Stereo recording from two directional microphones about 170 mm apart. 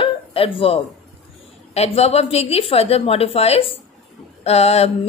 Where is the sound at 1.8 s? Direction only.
35° left (ahead or behind).